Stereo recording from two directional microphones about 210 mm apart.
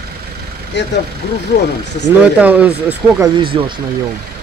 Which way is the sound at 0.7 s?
55° left (ahead or behind).